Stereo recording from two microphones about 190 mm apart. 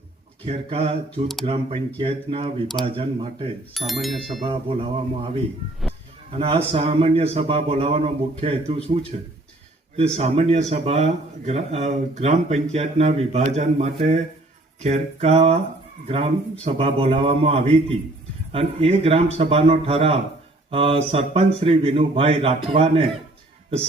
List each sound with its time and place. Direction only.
0.4 s a man's voice: 30° right (ahead or behind)
3.8 s speech: centre (ahead or behind)
4.4 s a man's voice: 30° right (ahead or behind)
16.6 s a man's voice: 30° right (ahead or behind)